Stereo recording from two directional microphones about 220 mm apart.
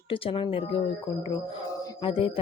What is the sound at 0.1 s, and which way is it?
Speech, 25° left (ahead or behind).